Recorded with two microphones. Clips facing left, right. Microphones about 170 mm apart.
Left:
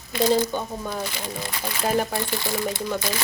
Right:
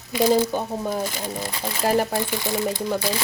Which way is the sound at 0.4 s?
30° right (ahead or behind).